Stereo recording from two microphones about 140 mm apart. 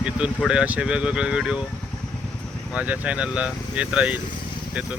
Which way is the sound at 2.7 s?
10° right (ahead or behind).